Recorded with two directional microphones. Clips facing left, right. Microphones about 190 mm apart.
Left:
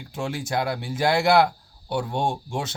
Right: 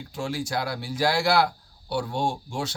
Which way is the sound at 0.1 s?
20° left (ahead or behind).